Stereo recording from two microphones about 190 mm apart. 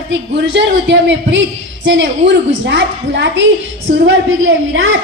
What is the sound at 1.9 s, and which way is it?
Speech, 70° right (ahead or behind).